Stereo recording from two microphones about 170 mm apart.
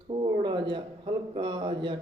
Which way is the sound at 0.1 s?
30° right (ahead or behind).